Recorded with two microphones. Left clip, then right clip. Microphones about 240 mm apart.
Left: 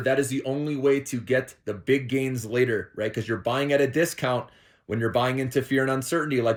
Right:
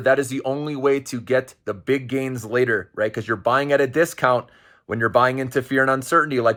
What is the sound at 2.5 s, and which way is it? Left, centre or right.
Speech, right.